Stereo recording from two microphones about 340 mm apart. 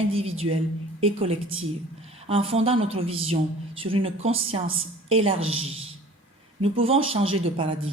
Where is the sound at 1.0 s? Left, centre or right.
Centre.